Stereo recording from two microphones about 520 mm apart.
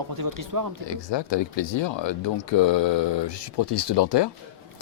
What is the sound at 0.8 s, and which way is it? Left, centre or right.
Speech, left.